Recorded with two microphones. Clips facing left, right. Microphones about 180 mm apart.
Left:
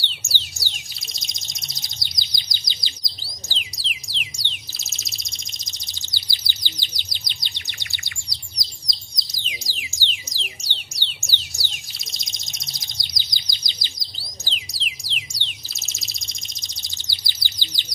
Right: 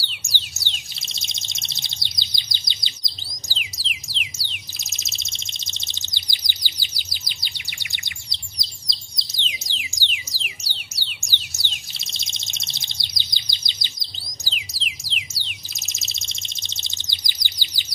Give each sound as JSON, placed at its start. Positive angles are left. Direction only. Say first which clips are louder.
{"t": 0.2, "sound": "bird", "louder": "left 1 dB", "side_deg": -15}
{"t": 3.5, "sound": "music", "louder": "right 2 dB", "side_deg": 0}
{"t": 4.7, "sound": "bird", "louder": "even", "side_deg": -20}
{"t": 10.0, "sound": "music", "louder": "left 3 dB", "side_deg": -10}
{"t": 11.5, "sound": "bird", "louder": "even", "side_deg": -25}
{"t": 14.5, "sound": "music", "louder": "right 2 dB", "side_deg": 0}
{"t": 15.7, "sound": "bird", "louder": "even", "side_deg": -15}